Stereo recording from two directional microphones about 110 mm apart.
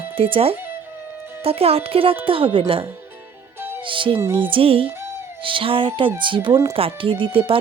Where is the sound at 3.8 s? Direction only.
50° right (ahead or behind).